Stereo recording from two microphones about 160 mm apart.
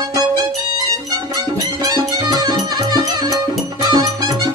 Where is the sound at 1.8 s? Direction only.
25° right (ahead or behind).